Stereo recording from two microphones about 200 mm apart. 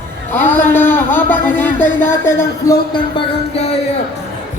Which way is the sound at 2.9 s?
25° left (ahead or behind).